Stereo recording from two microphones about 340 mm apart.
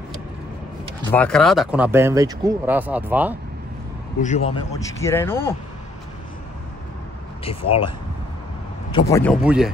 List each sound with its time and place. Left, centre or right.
1.1 s speech: centre
4.2 s a man's voice: centre
7.4 s a man's voice: centre
9.1 s speech: centre